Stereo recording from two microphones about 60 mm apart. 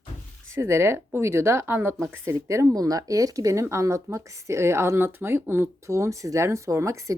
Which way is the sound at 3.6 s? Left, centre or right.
Right.